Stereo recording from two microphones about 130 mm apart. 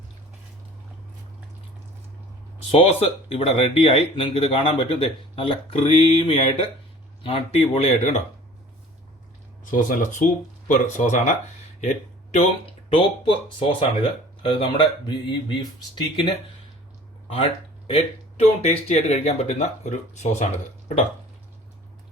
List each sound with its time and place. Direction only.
2.6 s speech: 50° left (ahead or behind)
9.7 s speech: 80° left
10.7 s speech: 70° left (ahead or behind)
12.9 s speech: 40° left (ahead or behind)
17.2 s a sound: 45° left (ahead or behind)
18.4 s speech: 55° left (ahead or behind)